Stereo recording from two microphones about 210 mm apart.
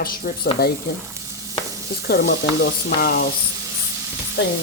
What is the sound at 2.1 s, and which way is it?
Speech, 55° left (ahead or behind).